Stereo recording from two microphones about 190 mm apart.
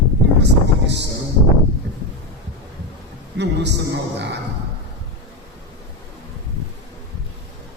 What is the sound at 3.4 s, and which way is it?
A man's voice, 65° right (ahead or behind).